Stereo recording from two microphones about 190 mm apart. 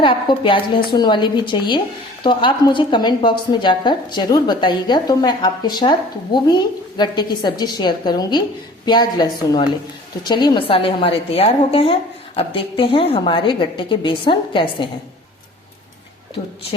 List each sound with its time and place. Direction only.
0.0 s a woman's voice: 25° left (ahead or behind)